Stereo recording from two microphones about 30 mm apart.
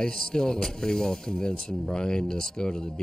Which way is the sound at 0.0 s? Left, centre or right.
Left.